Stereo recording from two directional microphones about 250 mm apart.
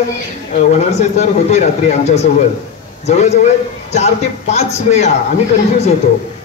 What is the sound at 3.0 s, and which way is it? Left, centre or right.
A man's voice, left.